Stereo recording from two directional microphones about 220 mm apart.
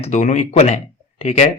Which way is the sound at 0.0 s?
35° left (ahead or behind).